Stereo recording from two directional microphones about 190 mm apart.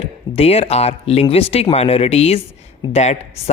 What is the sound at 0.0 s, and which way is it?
Speech, 30° left (ahead or behind).